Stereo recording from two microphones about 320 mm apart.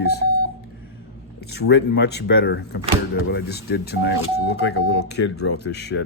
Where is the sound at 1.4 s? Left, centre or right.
Left.